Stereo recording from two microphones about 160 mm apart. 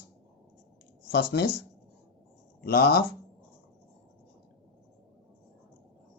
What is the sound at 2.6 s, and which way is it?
Speech, 70° left (ahead or behind).